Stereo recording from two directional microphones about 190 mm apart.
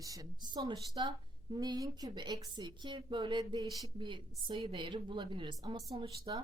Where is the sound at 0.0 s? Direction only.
20° right (ahead or behind).